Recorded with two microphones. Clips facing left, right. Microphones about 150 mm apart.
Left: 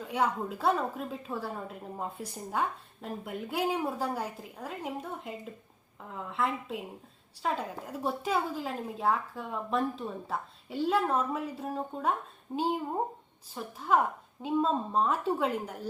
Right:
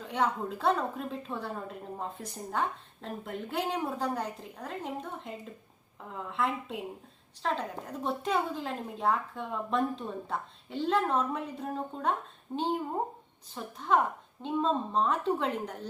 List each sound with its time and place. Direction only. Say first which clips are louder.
0.0 s a woman's voice: even; 5° left (ahead or behind)